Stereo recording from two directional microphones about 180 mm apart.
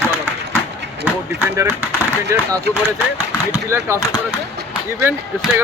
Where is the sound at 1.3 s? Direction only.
15° right (ahead or behind).